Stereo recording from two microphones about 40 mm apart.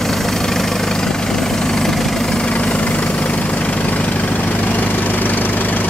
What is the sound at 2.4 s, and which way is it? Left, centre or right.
Vehicle, left.